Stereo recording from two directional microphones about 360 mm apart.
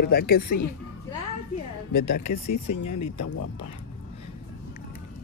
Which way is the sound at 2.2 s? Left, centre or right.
Left.